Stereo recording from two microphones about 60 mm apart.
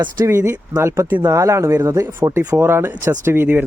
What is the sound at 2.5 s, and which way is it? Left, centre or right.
Speech, right.